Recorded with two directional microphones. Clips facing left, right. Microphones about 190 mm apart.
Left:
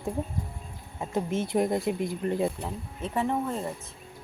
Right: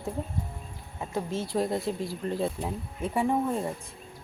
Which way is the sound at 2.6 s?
10° right (ahead or behind).